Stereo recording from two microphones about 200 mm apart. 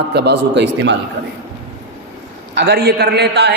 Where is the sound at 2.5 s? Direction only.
55° right (ahead or behind).